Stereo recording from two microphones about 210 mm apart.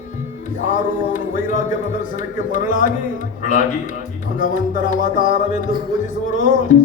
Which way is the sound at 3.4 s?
40° left (ahead or behind).